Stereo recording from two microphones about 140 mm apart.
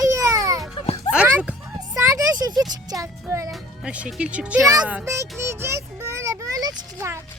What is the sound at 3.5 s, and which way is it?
A child's voice, 5° right (ahead or behind).